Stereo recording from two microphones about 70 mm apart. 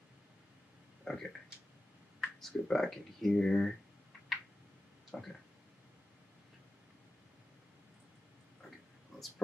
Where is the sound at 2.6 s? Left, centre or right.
Centre.